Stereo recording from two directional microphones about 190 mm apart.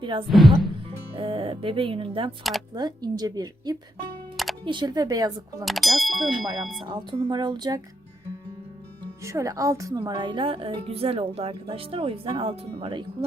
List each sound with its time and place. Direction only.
0.0 s speech: 25° right (ahead or behind)
0.3 s speech: centre (ahead or behind)
0.9 s a woman's voice: 30° right (ahead or behind)
5.6 s speech: centre (ahead or behind)
6.8 s a woman's voice: 25° right (ahead or behind)
9.2 s a woman's voice: 15° right (ahead or behind)